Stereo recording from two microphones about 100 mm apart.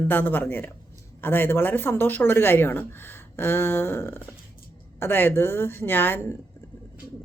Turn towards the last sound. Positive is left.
turn(degrees=20)  # may be behind; listen again after turning